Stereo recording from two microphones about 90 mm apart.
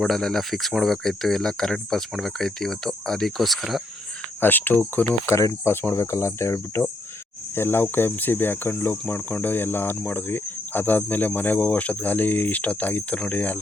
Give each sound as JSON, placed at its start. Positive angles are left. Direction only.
{"t": 0.0, "sound": "speech", "side_deg": 5}
{"t": 4.4, "sound": "speech", "side_deg": 20}
{"t": 5.2, "sound": "speech", "side_deg": 35}